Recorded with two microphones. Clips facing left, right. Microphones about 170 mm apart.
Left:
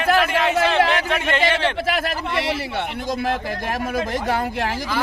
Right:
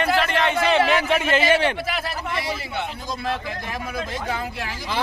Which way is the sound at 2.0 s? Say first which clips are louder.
Left 4 dB; 70° left (ahead or behind).